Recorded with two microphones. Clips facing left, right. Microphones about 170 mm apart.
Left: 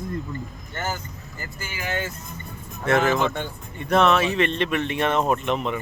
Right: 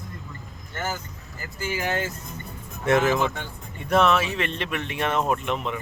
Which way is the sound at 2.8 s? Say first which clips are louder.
Even; 15° right (ahead or behind).